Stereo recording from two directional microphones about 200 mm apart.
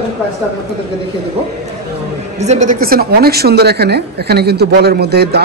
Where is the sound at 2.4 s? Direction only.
35° right (ahead or behind).